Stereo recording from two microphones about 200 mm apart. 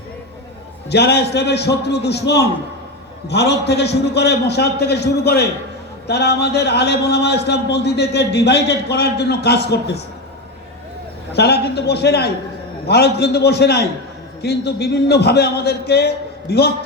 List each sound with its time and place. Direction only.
0.9 s a man's voice: 55° left (ahead or behind)
11.3 s a man's voice: 55° left (ahead or behind)